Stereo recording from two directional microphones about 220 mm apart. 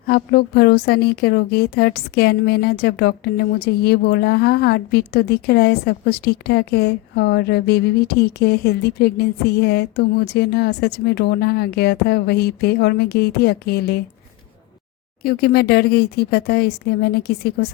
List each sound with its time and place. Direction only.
0.1 s a woman's voice: 45° left (ahead or behind)
15.2 s a woman's voice: 45° left (ahead or behind)